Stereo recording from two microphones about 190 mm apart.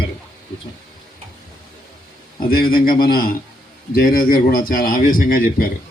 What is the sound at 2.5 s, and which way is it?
A man's voice, 50° left (ahead or behind).